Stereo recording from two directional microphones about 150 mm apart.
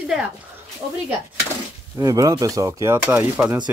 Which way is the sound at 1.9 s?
25° right (ahead or behind).